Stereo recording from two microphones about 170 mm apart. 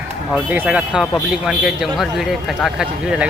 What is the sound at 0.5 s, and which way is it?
Speech, 10° right (ahead or behind).